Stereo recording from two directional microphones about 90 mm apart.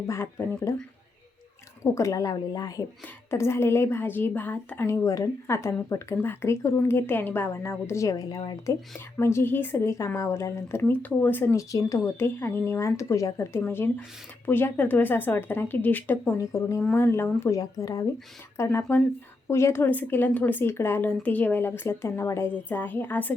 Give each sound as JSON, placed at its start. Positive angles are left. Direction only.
{"t": 0.1, "sound": "speech", "side_deg": 30}
{"t": 3.2, "sound": "a woman's voice", "side_deg": 30}
{"t": 4.9, "sound": "a woman's voice", "side_deg": 40}
{"t": 8.1, "sound": "speech", "side_deg": 45}
{"t": 9.1, "sound": "a woman's voice", "side_deg": 30}
{"t": 11.5, "sound": "speech", "side_deg": 35}
{"t": 13.7, "sound": "a woman's voice", "side_deg": 25}
{"t": 16.4, "sound": "a woman's voice", "side_deg": 35}
{"t": 17.6, "sound": "a woman's voice", "side_deg": 40}